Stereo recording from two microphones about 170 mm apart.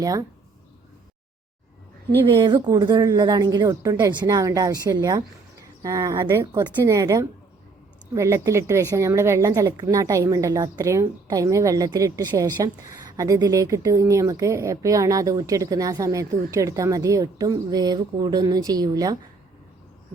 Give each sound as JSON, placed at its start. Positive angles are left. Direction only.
{"t": 0.0, "sound": "speech", "side_deg": -20}
{"t": 2.3, "sound": "speech", "side_deg": -25}